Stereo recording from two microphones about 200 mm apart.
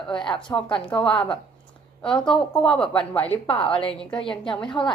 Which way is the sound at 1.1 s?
5° left (ahead or behind).